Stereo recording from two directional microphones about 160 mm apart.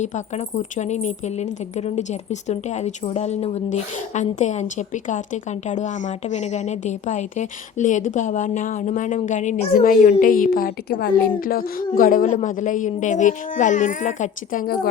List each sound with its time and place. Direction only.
0.0 s speech: 45° left (ahead or behind)
10.1 s a woman's voice: 60° left (ahead or behind)